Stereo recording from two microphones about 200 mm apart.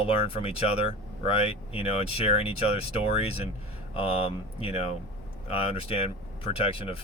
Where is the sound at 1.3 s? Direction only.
30° left (ahead or behind).